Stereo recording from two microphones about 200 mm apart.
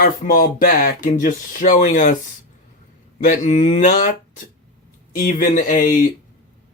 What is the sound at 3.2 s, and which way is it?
Speech, 40° left (ahead or behind).